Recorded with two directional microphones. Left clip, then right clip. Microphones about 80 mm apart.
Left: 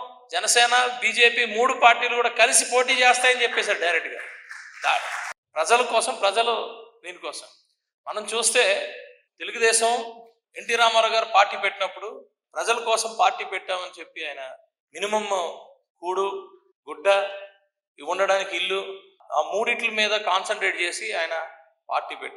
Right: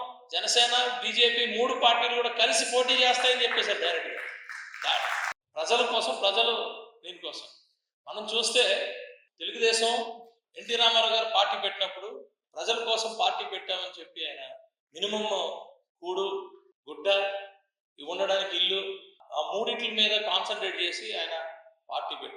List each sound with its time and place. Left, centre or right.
0.3 s a man's voice: left